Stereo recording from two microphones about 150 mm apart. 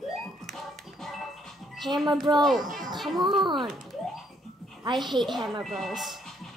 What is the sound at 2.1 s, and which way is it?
Speech, 30° right (ahead or behind).